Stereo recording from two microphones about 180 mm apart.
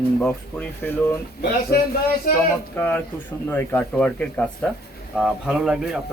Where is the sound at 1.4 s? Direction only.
60° left (ahead or behind).